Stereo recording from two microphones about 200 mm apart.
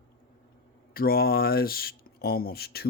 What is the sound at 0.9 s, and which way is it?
Speech, 50° left (ahead or behind).